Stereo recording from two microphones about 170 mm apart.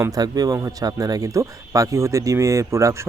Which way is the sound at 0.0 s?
20° right (ahead or behind).